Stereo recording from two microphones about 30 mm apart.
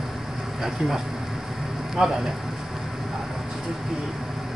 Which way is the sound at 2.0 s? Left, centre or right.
Right.